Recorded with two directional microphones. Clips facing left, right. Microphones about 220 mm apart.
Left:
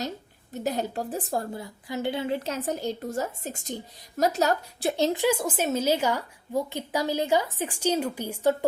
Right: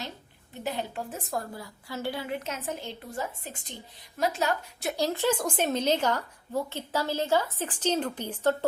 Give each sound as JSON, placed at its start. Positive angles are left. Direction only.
{"t": 0.6, "sound": "a woman's voice", "side_deg": 40}